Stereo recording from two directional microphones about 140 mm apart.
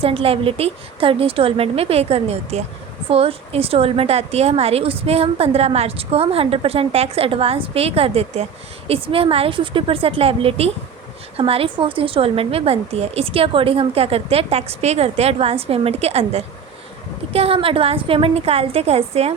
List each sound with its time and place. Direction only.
0.0 s a woman's voice: 40° right (ahead or behind)